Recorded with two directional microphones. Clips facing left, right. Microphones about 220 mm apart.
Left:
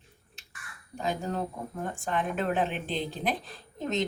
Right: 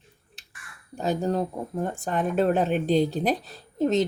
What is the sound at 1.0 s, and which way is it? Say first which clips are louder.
Speech: right 6 dB; 35° right (ahead or behind).